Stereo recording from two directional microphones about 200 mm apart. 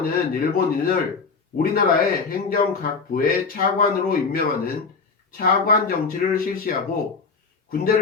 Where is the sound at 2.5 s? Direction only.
45° left (ahead or behind).